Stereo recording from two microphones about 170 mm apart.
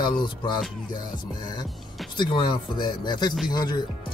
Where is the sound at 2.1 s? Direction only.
30° left (ahead or behind).